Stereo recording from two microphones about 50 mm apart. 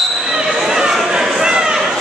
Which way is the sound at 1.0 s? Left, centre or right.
Centre.